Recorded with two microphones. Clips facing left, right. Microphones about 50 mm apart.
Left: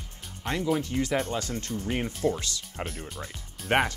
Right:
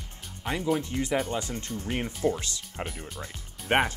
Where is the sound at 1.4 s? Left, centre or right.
Right.